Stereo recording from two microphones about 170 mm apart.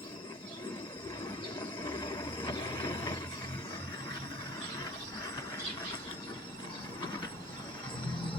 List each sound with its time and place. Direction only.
1.8 s train: 30° left (ahead or behind)